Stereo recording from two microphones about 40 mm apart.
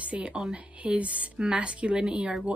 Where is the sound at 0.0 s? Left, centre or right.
Right.